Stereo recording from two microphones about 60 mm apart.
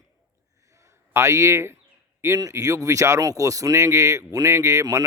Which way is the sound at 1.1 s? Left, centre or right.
Right.